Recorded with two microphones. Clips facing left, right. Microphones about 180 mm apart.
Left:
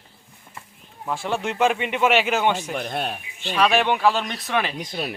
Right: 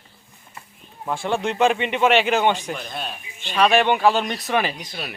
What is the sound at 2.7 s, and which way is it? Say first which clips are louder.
Speech: left 5 dB; 60° left (ahead or behind).